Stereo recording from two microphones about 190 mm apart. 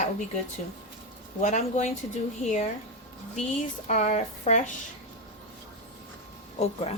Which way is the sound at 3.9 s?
35° left (ahead or behind).